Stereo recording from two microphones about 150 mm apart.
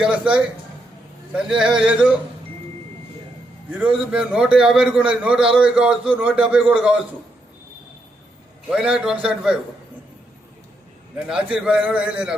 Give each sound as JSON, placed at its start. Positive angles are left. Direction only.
{"t": 0.0, "sound": "a man's voice", "side_deg": -5}
{"t": 3.7, "sound": "a man's voice", "side_deg": -10}
{"t": 8.7, "sound": "a man's voice", "side_deg": -5}
{"t": 11.3, "sound": "a man's voice", "side_deg": -5}